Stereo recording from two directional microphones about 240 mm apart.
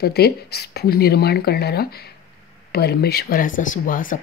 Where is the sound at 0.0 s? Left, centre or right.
Left.